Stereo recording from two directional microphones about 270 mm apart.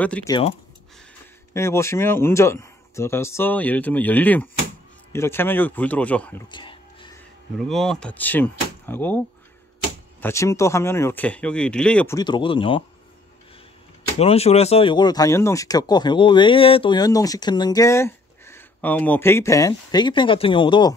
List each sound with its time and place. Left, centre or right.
0.0 s speech: centre
6.5 s music: centre
7.5 s speech: centre
10.2 s speech: centre
14.1 s speech: left